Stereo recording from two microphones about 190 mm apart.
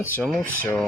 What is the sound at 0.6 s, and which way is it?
Speech, 10° left (ahead or behind).